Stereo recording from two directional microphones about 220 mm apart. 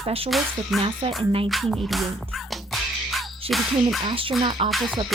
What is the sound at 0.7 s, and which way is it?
Music, centre (ahead or behind).